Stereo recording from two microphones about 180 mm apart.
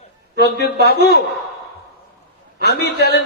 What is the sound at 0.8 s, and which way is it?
Speech, 60° left (ahead or behind).